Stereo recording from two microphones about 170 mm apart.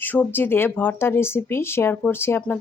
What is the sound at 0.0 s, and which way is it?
Speech, 10° left (ahead or behind).